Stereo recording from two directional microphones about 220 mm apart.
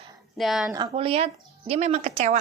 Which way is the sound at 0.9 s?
25° right (ahead or behind).